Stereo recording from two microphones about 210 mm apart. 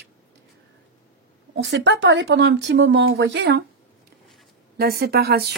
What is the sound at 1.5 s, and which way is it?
Speech, 55° right (ahead or behind).